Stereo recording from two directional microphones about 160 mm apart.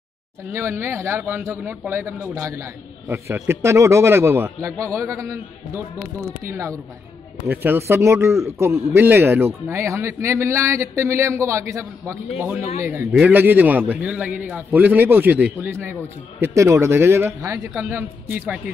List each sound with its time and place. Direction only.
0.5 s a man's voice: 15° right (ahead or behind)